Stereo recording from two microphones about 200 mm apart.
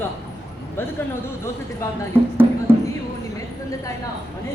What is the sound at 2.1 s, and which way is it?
Speech, 10° right (ahead or behind).